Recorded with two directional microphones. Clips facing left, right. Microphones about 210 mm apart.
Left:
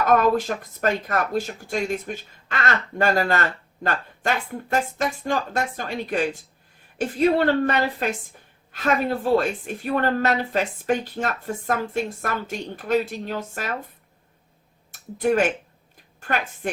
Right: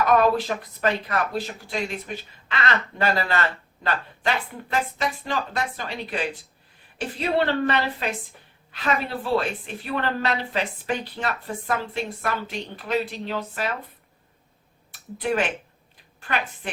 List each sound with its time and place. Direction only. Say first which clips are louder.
0.0 s speech: left 1 dB; 45° left (ahead or behind)
14.9 s speech: left 4 dB; 45° left (ahead or behind)